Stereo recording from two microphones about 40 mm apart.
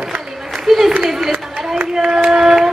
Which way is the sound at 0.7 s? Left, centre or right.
Centre.